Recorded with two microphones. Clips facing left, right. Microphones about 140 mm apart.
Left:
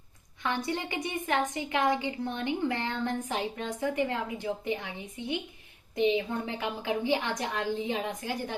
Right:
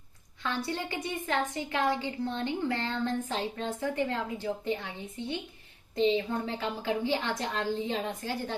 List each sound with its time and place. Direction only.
0.4 s a woman's voice: 20° left (ahead or behind)